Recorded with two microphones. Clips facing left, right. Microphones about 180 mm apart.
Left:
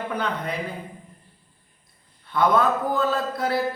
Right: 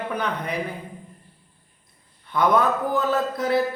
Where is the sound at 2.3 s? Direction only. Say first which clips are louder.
Even; 15° right (ahead or behind).